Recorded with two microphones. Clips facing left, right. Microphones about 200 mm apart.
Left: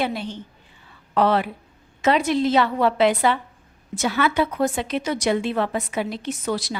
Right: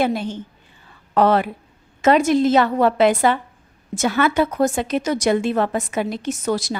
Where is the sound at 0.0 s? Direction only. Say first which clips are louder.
Right 5 dB; 45° right (ahead or behind).